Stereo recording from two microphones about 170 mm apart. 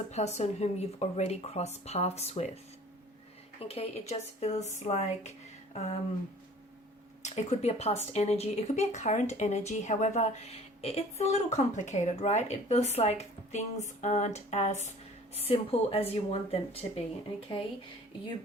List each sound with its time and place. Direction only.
0.1 s speech: 40° left (ahead or behind)
3.6 s speech: 35° left (ahead or behind)
7.2 s speech: 40° left (ahead or behind)